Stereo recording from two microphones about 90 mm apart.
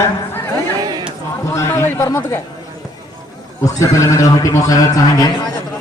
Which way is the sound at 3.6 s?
35° left (ahead or behind).